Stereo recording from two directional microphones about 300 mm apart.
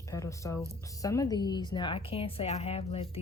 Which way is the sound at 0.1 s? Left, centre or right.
Centre.